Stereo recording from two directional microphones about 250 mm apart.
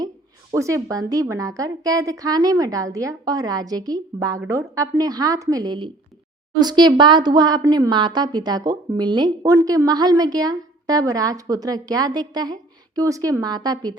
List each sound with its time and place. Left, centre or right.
0.5 s speech: centre